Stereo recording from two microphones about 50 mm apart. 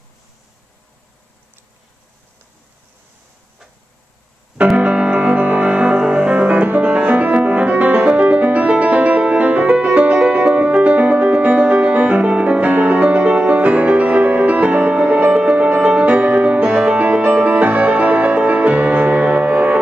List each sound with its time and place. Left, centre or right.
4.7 s music: right